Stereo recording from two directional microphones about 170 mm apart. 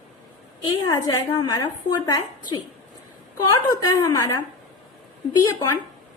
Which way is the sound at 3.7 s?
20° left (ahead or behind).